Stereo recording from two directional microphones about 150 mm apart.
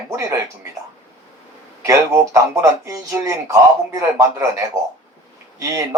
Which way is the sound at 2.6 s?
20° right (ahead or behind).